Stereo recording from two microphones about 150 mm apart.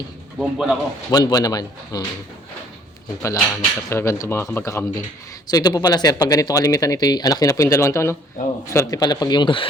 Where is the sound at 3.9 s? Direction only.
20° left (ahead or behind); by 9.7 s 35° left (ahead or behind).